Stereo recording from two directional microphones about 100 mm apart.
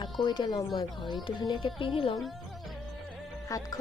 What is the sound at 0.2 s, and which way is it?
Speech, 45° left (ahead or behind).